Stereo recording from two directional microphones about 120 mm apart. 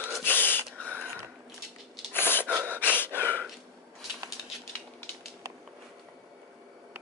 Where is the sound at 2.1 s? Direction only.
15° left (ahead or behind).